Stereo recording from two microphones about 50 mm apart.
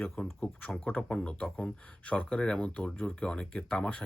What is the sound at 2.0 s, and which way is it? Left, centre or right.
Speech, left.